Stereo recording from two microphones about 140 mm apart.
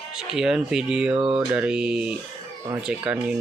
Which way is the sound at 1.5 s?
5° right (ahead or behind).